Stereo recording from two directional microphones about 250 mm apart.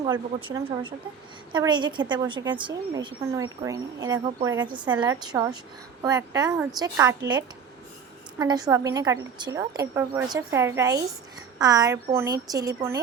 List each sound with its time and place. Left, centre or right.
0.0 s a woman's voice: centre
4.9 s a woman's voice: centre
8.4 s a woman's voice: centre